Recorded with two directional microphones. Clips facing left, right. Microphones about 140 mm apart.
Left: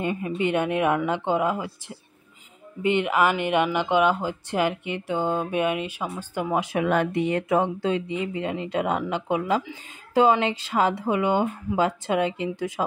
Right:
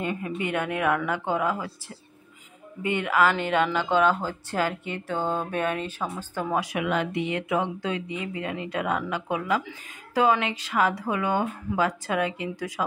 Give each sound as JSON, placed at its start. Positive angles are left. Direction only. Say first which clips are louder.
{"t": 0.0, "sound": "speech", "louder": "left 4 dB", "side_deg": 20}
{"t": 6.6, "sound": "speech", "louder": "left 4 dB", "side_deg": 30}
{"t": 6.9, "sound": "speech", "louder": "left 5 dB", "side_deg": 50}